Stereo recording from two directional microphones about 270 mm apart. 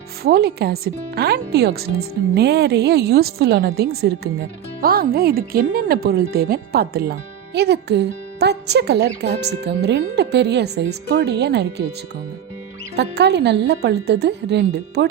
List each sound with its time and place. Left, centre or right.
0.2 s speech: right
13.0 s speech: right